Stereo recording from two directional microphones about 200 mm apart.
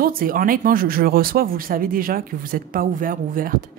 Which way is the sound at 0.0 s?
45° right (ahead or behind).